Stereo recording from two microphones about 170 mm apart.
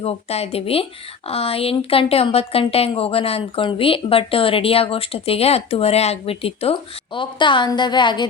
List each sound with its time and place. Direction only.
0.0 s a woman's voice: 35° left (ahead or behind)